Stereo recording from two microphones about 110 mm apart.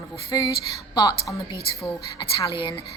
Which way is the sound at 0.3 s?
35° left (ahead or behind).